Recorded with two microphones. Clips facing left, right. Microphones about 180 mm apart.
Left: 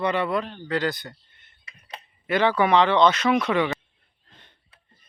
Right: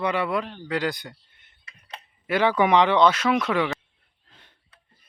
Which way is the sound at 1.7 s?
15° left (ahead or behind).